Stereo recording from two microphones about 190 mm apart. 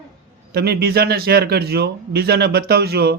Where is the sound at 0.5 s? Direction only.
55° right (ahead or behind).